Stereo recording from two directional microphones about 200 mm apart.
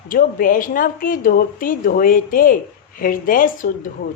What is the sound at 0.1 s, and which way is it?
A woman's voice, 45° left (ahead or behind).